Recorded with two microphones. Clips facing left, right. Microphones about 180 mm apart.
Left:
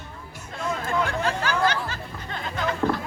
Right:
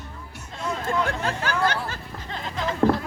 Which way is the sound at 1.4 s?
50° right (ahead or behind).